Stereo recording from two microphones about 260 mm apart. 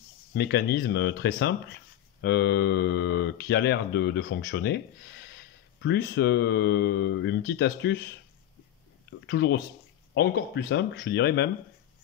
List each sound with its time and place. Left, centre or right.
0.3 s speech: left
9.2 s speech: left